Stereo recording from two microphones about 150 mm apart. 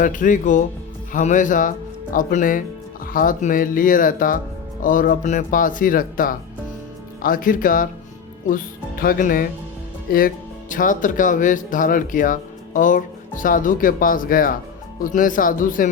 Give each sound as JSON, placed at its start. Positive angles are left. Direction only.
{"t": 0.0, "sound": "speech", "side_deg": 60}